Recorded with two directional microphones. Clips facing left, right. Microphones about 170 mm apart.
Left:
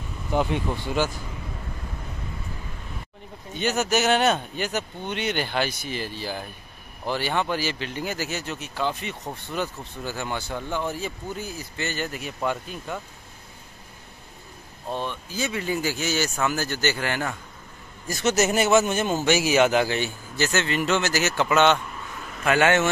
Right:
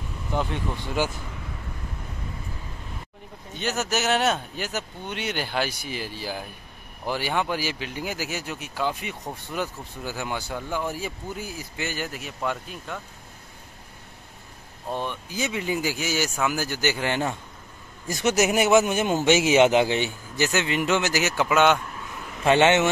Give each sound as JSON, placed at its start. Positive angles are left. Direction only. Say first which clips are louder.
{"t": 3.5, "sound": "speech", "louder": "left 3 dB", "side_deg": 0}
{"t": 14.9, "sound": "speech", "louder": "even", "side_deg": -15}
{"t": 22.4, "sound": "speech", "louder": "right 2 dB", "side_deg": -25}